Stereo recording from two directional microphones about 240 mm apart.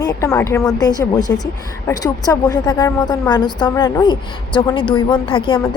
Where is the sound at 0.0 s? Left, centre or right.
Centre.